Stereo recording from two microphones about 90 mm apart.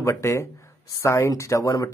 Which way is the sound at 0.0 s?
35° left (ahead or behind).